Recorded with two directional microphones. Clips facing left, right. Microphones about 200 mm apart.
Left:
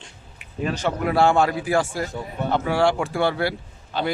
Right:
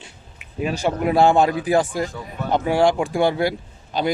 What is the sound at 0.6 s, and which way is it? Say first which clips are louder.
Speech: right 2 dB; 10° right (ahead or behind).